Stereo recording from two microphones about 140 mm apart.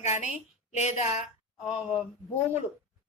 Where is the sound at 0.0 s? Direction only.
55° left (ahead or behind).